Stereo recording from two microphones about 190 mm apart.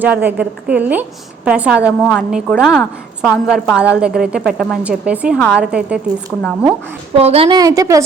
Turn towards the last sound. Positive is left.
turn(degrees=-15)  # may be behind; listen again after turning